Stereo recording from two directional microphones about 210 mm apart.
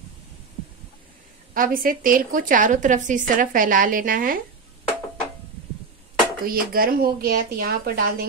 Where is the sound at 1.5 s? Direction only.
40° right (ahead or behind).